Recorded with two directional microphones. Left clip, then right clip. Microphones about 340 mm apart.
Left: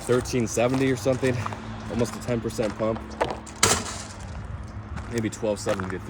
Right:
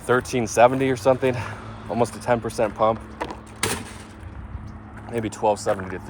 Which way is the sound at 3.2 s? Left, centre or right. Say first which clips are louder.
Left 4 dB; left.